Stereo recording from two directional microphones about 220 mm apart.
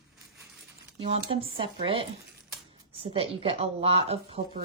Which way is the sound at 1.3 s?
25° right (ahead or behind).